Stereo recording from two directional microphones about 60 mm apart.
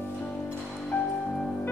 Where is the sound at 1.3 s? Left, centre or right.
Centre.